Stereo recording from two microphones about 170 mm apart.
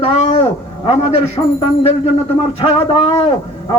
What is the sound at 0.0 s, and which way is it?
Speech, 40° left (ahead or behind).